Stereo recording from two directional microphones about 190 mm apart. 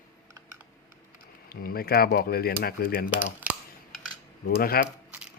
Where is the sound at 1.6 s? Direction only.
55° left (ahead or behind).